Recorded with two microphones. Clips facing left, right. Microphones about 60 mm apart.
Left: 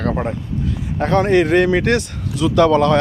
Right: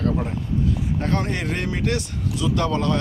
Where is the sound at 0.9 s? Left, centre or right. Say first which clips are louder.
Left 14 dB; left.